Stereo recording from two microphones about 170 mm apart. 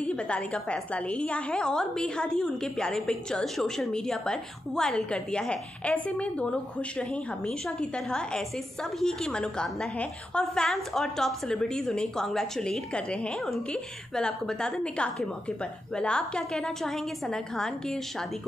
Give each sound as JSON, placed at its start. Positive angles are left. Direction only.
{"t": 0.0, "sound": "a woman's voice", "side_deg": 5}